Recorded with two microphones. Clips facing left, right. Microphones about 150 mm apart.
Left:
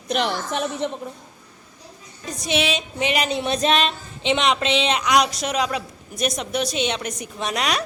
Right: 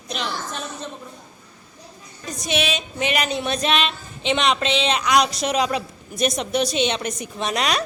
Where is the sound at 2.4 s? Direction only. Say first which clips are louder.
Left 1 dB; 25° left (ahead or behind).